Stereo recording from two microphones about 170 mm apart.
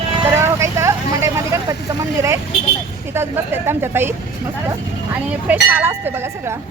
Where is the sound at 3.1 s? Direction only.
15° right (ahead or behind).